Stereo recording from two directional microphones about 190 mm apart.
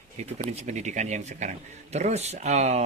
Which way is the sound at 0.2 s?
35° right (ahead or behind).